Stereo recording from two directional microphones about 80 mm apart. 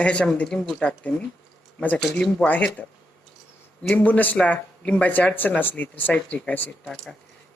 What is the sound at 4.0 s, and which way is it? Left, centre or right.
Speech, left.